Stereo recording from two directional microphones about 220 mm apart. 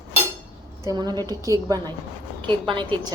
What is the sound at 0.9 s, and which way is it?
A woman's voice, 20° right (ahead or behind).